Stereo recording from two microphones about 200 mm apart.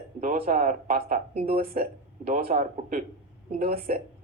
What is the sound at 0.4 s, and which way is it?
Speech, 40° right (ahead or behind).